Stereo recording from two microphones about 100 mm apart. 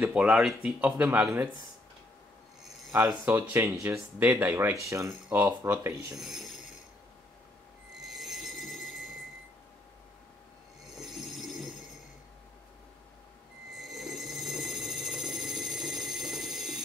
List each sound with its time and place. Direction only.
0.0 s speech: 10° right (ahead or behind)
3.1 s speech: 20° right (ahead or behind)
4.8 s speech: 30° right (ahead or behind)
6.1 s mechanisms: 5° right (ahead or behind)
8.0 s train: centre (ahead or behind)
10.9 s train: 5° right (ahead or behind)
13.7 s a sound: centre (ahead or behind)